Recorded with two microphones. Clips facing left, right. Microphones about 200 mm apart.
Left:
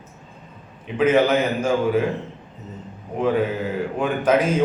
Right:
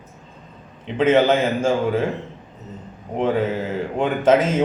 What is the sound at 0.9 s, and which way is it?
A man's voice, 25° right (ahead or behind).